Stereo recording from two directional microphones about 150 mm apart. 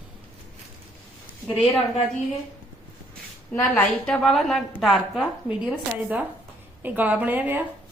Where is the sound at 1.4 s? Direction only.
Centre (ahead or behind).